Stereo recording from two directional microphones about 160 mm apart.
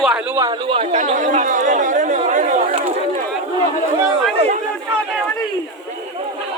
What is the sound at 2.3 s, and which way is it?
Chatter, 50° right (ahead or behind).